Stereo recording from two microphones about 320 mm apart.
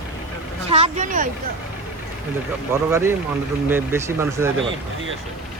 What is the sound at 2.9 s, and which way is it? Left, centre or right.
Speech, centre.